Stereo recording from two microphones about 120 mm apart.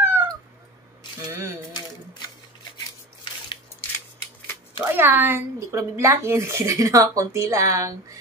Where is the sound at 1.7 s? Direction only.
35° left (ahead or behind).